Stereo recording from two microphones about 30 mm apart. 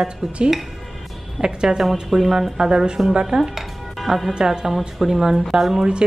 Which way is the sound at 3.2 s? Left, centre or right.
Centre.